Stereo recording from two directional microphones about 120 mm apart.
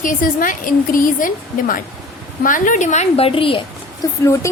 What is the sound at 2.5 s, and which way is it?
Speech, 90° left.